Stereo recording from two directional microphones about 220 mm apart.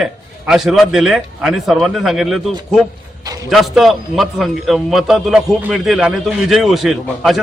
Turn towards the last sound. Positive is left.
turn(degrees=0)  # may be behind; listen again after turning